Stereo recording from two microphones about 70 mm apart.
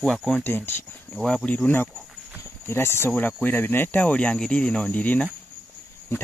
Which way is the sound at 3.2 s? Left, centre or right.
Left.